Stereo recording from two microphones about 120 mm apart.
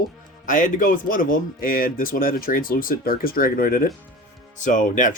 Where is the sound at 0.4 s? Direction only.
90° left.